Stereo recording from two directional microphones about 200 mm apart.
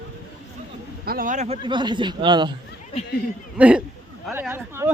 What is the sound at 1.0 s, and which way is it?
Speech, 45° right (ahead or behind).